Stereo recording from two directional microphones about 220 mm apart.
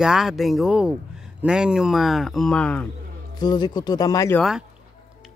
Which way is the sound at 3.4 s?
20° left (ahead or behind).